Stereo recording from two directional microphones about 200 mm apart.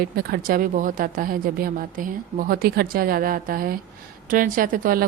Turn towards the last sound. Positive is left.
turn(degrees=-45)  # may be behind; listen again after turning